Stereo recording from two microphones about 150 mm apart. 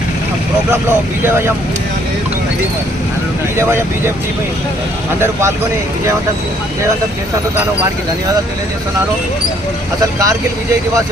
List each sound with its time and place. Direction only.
1.2 s speech: 15° right (ahead or behind)
3.6 s speech: 15° right (ahead or behind)
5.2 s speech: 20° right (ahead or behind)
10.0 s speech: 25° right (ahead or behind)